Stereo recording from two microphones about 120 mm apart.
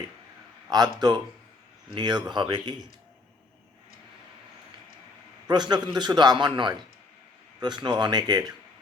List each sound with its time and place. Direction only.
0.7 s a man's voice: 35° right (ahead or behind)
5.5 s a man's voice: 35° right (ahead or behind)